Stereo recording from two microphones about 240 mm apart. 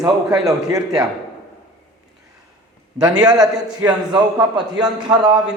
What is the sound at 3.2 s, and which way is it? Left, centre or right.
A man's voice, centre.